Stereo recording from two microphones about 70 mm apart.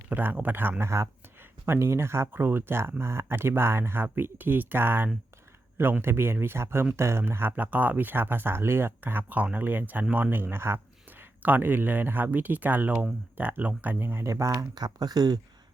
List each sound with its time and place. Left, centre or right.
0.1 s speech: right
0.8 s speech: right
7.5 s speech: right
14.0 s speech: right
14.5 s speech: right